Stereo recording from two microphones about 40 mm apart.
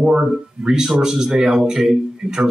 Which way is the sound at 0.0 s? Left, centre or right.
Right.